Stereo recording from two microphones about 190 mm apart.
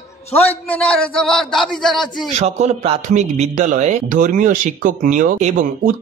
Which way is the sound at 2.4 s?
35° right (ahead or behind).